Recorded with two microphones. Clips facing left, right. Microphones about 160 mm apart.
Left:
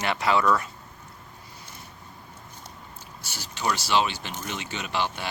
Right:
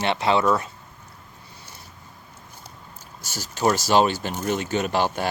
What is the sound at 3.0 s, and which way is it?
Speech, 45° right (ahead or behind).